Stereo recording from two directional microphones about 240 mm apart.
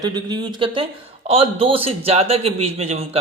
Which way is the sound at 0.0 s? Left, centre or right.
Centre.